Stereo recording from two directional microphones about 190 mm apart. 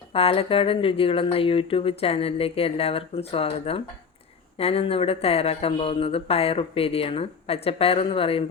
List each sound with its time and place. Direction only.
0.1 s speech: 30° left (ahead or behind)